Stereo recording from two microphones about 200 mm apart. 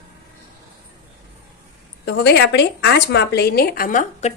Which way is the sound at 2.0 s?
55° left (ahead or behind).